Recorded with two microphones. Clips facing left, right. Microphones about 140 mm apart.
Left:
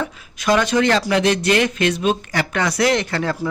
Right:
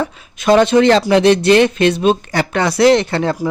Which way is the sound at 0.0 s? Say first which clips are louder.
Right 5 dB; 30° right (ahead or behind).